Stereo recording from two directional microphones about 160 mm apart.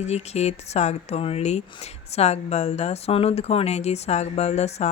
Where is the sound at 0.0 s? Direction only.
40° left (ahead or behind).